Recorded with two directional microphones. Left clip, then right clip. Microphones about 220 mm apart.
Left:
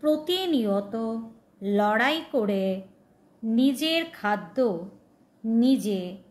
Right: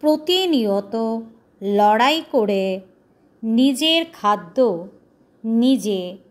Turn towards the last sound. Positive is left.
turn(degrees=-25)  # may be behind; listen again after turning